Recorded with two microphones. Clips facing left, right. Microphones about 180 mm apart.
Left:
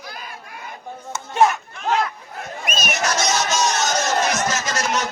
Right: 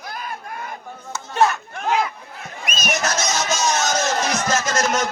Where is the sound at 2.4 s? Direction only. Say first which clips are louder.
Left 5 dB; 50° left (ahead or behind).